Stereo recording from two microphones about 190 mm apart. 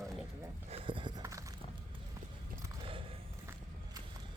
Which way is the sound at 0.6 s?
30° right (ahead or behind).